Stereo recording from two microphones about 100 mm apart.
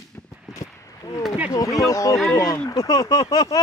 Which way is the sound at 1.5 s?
35° left (ahead or behind).